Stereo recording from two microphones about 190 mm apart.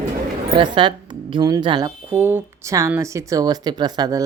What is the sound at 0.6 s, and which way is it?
A woman's voice, 25° right (ahead or behind).